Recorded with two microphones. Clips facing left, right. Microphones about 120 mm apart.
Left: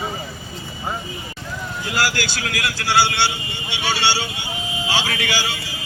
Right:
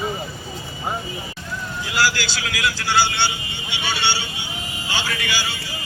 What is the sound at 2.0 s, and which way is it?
Speech, 55° left (ahead or behind).